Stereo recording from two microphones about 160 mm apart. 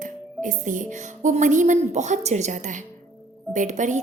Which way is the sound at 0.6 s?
55° right (ahead or behind).